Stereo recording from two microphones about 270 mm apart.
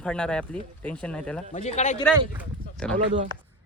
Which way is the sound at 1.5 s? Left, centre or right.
Left.